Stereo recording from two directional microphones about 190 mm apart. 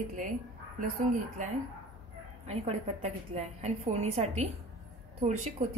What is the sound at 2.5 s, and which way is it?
A woman's voice, 35° right (ahead or behind).